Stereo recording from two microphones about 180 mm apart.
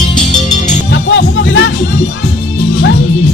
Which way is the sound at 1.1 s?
80° left.